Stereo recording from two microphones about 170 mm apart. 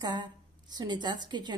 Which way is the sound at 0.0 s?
25° right (ahead or behind).